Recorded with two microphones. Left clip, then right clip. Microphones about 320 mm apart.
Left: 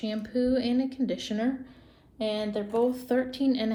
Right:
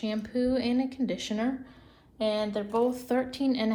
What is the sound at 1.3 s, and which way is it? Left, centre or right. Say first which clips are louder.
Speech: right 1 dB; right.